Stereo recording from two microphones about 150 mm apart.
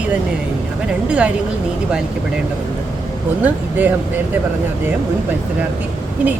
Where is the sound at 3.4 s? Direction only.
10° right (ahead or behind).